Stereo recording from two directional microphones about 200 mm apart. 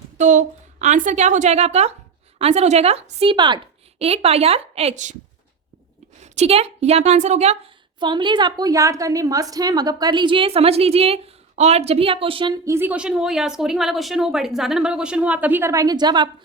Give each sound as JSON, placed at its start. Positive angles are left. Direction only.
{"t": 0.2, "sound": "a woman's voice", "side_deg": -40}
{"t": 6.1, "sound": "a woman's voice", "side_deg": -35}
{"t": 12.6, "sound": "speech", "side_deg": -10}